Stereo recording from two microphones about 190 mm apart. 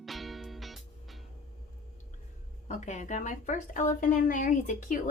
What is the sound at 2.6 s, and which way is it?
A woman's voice, 40° left (ahead or behind).